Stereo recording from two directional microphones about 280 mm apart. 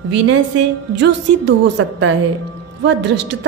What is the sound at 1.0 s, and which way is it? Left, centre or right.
A woman's voice, right.